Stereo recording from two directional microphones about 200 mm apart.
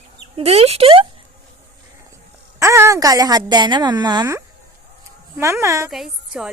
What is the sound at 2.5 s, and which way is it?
A woman's voice, 15° right (ahead or behind).